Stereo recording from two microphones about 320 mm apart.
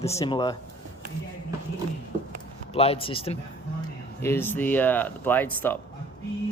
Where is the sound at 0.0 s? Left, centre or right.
Centre.